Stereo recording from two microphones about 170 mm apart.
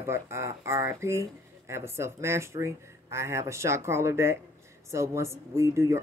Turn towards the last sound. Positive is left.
turn(degrees=-15)  # may be behind; listen again after turning